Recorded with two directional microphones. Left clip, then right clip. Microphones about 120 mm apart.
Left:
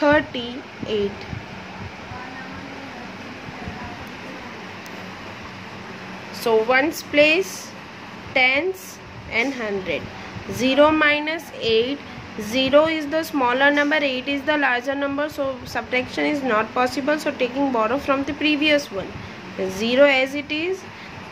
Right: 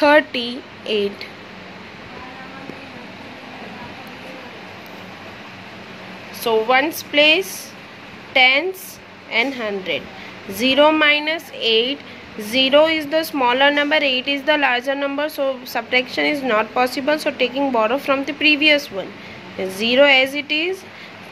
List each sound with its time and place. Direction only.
0.0 s speech: 25° right (ahead or behind)
6.4 s a woman's voice: 10° right (ahead or behind)